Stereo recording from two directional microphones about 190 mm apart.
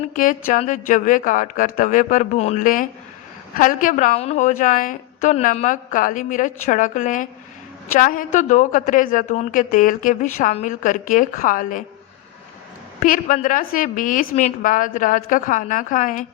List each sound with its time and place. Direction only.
0.1 s a woman's voice: 45° left (ahead or behind)
13.0 s a woman's voice: 45° left (ahead or behind)